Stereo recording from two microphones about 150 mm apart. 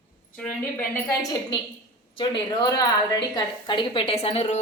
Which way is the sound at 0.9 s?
25° left (ahead or behind).